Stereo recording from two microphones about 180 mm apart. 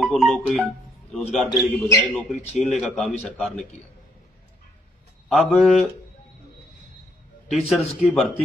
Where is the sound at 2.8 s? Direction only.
Centre (ahead or behind).